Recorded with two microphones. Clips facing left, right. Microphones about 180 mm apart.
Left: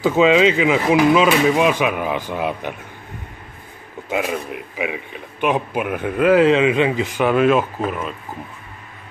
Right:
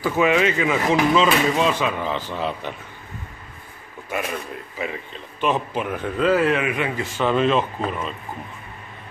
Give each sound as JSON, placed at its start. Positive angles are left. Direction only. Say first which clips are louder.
{"t": 0.0, "sound": "speech", "louder": "left 5 dB", "side_deg": 20}
{"t": 4.1, "sound": "speech", "louder": "left 5 dB", "side_deg": 15}